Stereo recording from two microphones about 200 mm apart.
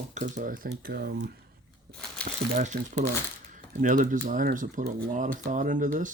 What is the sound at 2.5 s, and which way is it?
Speech, 35° right (ahead or behind).